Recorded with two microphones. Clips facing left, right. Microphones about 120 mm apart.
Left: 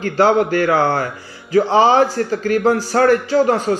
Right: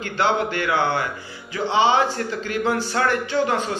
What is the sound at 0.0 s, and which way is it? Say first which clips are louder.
A man's voice: left 7 dB; 40° left (ahead or behind).